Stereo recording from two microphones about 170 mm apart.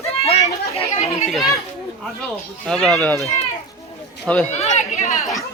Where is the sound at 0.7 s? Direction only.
40° left (ahead or behind).